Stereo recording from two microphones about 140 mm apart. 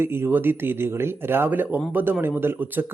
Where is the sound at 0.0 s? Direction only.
15° right (ahead or behind).